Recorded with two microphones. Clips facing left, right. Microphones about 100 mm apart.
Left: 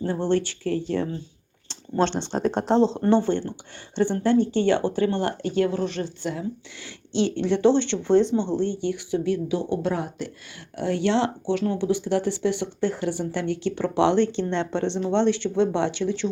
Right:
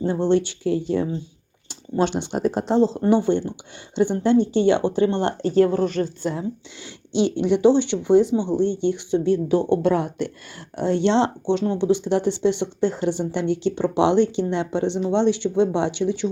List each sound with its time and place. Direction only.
0.0 s speech: 20° right (ahead or behind); by 6.4 s 40° right (ahead or behind)
7.1 s speech: 15° right (ahead or behind)
9.5 s speech: 55° right (ahead or behind)
10.8 s speech: 25° right (ahead or behind)